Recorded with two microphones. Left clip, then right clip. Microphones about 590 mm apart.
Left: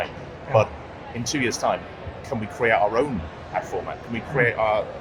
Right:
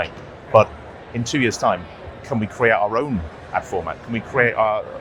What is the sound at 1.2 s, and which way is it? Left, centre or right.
Speech, right.